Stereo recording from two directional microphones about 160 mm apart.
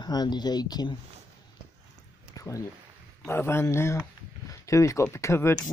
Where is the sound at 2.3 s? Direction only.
20° left (ahead or behind).